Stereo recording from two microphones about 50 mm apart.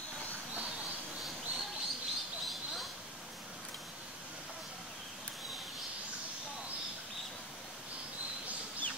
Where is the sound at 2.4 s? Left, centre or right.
Centre.